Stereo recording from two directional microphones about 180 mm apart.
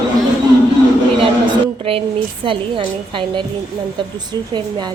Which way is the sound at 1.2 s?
30° right (ahead or behind).